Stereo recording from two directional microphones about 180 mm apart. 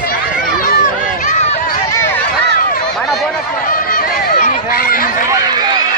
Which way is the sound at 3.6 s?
55° left (ahead or behind).